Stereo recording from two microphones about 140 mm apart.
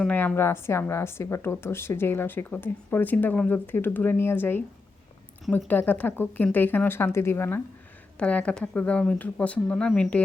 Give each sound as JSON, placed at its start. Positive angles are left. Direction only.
{"t": 0.1, "sound": "a woman's voice", "side_deg": 15}
{"t": 5.6, "sound": "a woman's voice", "side_deg": 15}